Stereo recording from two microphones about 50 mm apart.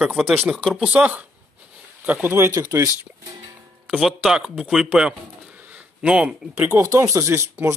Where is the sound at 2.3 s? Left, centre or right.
Right.